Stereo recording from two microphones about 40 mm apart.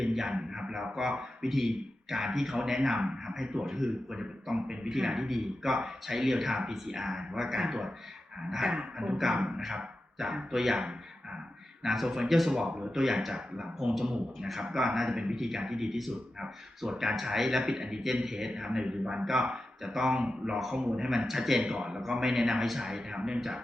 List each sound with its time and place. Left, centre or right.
0.0 s a man's voice: centre
8.6 s speech: right
11.8 s a man's voice: centre
15.4 s a man's voice: centre